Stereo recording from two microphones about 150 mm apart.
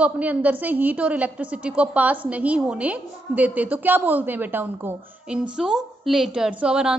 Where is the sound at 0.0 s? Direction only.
10° right (ahead or behind).